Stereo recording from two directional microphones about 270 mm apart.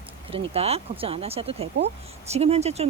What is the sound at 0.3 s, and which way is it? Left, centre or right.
Speech, right.